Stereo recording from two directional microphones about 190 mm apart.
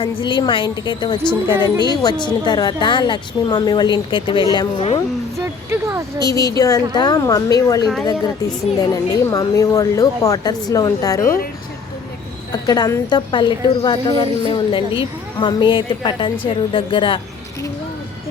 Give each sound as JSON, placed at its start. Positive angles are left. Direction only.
{"t": 0.0, "sound": "a woman's voice", "side_deg": 25}
{"t": 6.1, "sound": "a woman's voice", "side_deg": 20}
{"t": 12.5, "sound": "a woman's voice", "side_deg": 20}